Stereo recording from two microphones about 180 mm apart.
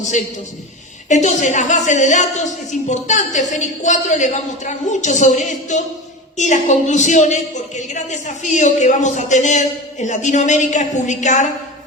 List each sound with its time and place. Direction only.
1.0 s a woman's voice: 40° left (ahead or behind)